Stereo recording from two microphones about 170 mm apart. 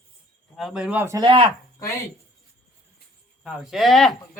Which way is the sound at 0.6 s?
5° right (ahead or behind).